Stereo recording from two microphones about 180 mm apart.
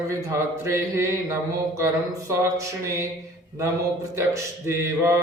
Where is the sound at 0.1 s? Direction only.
15° right (ahead or behind).